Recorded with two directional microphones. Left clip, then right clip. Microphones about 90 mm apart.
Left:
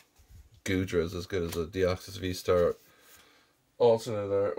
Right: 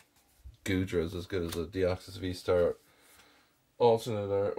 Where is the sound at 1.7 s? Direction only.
30° left (ahead or behind).